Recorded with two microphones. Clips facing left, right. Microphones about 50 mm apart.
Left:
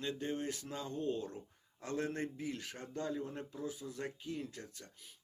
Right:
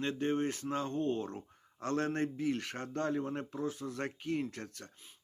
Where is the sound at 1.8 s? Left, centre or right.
Right.